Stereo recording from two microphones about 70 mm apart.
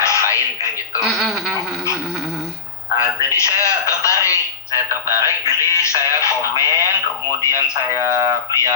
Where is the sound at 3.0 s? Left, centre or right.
Left.